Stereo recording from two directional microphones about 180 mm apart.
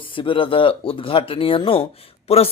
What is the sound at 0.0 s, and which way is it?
Speech, 30° left (ahead or behind).